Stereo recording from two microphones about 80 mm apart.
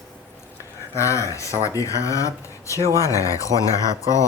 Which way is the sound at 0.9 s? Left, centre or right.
Left.